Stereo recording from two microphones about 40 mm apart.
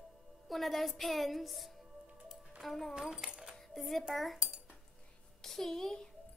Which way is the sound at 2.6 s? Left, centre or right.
Centre.